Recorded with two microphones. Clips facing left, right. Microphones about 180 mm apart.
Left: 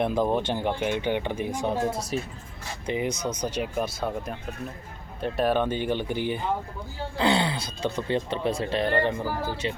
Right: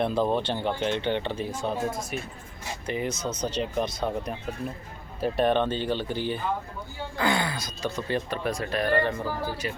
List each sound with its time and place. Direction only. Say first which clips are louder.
0.0 s speech: left 1 dB; 15° left (ahead or behind)
1.7 s speech: left 2 dB; 75° left (ahead or behind)
2.8 s speech: left 2 dB; 15° left (ahead or behind)
7.2 s speech: left 3 dB; 30° left (ahead or behind)